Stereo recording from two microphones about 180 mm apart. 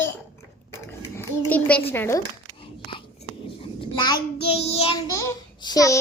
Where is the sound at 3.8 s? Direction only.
25° left (ahead or behind).